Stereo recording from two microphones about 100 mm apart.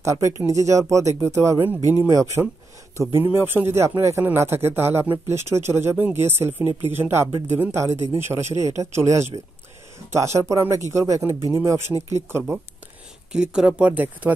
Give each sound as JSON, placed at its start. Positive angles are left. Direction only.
{"t": 0.0, "sound": "speech", "side_deg": -30}
{"t": 1.8, "sound": "speech", "side_deg": 35}
{"t": 2.0, "sound": "a man's voice", "side_deg": -35}
{"t": 13.3, "sound": "speech", "side_deg": -5}